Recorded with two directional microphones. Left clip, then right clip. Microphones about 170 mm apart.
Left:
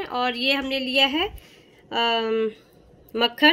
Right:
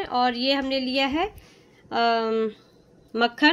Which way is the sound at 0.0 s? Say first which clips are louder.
Right 1 dB; 45° right (ahead or behind).